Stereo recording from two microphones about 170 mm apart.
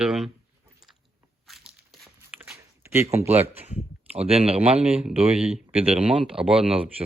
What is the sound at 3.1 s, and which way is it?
Speech, 40° right (ahead or behind).